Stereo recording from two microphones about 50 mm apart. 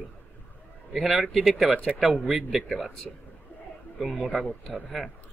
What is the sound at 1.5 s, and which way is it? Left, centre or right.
Speech, centre.